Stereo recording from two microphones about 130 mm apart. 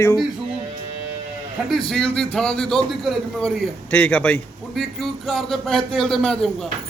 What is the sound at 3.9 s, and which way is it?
Speech, 10° left (ahead or behind).